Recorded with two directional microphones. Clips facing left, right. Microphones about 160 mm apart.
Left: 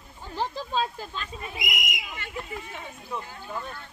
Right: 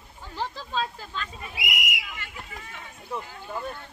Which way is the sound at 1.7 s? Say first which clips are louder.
Right 1 dB; 10° right (ahead or behind).